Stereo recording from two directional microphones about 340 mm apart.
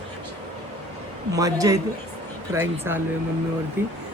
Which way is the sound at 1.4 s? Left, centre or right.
Centre.